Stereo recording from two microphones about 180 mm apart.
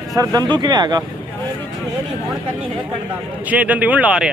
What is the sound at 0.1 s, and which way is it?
Speech, 20° right (ahead or behind).